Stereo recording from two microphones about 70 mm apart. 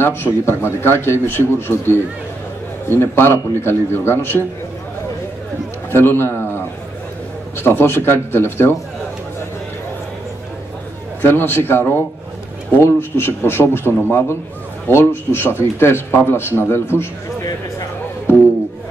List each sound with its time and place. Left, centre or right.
0.0 s speech: left
3.0 s speech: left
5.9 s a sound: left
7.5 s speech: left
11.1 s speech: left